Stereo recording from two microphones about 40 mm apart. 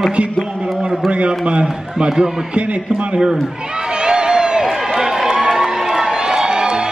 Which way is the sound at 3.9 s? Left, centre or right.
Centre.